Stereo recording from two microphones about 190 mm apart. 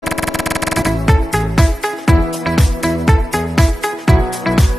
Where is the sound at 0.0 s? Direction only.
Centre (ahead or behind).